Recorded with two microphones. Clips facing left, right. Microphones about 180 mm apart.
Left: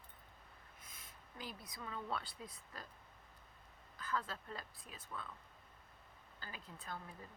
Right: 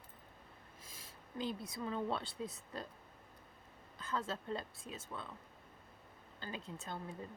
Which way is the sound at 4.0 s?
25° right (ahead or behind).